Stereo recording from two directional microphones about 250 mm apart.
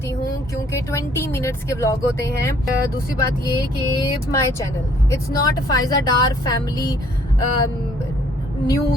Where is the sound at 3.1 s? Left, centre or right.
Centre.